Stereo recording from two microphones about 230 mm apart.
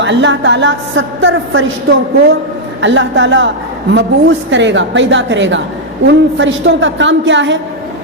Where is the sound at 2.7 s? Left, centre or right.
Right.